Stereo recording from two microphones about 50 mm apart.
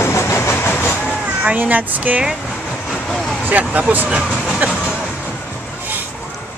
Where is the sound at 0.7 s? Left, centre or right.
Left.